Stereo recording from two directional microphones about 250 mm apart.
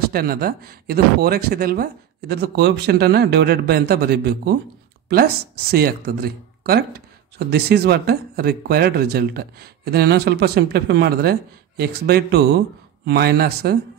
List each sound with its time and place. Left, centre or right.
0.0 s speech: right